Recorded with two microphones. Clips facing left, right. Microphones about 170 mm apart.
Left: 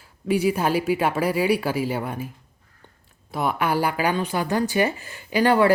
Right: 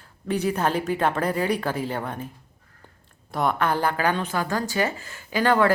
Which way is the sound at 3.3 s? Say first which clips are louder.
Even; 5° left (ahead or behind).